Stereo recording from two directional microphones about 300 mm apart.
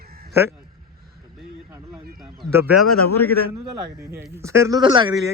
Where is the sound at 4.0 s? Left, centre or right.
Centre.